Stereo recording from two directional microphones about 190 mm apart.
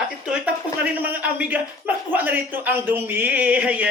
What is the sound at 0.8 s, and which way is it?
Speech, 10° right (ahead or behind).